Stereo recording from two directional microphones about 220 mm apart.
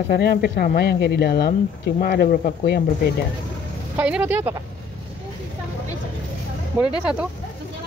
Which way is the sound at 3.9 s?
5° right (ahead or behind).